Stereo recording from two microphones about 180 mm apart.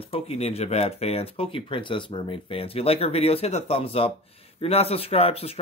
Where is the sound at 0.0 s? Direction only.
35° left (ahead or behind).